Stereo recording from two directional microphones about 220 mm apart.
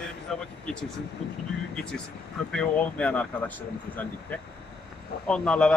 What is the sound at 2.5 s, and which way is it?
Speech, 5° left (ahead or behind).